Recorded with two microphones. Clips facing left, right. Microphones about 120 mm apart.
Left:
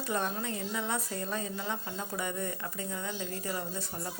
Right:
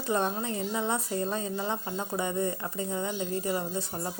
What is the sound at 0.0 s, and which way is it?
A woman's voice, 30° right (ahead or behind).